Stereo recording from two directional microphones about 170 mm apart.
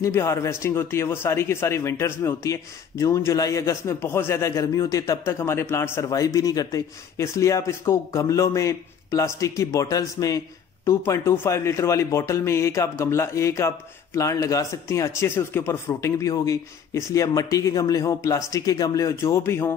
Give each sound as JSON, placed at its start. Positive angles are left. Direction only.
{"t": 0.0, "sound": "a man's voice", "side_deg": 15}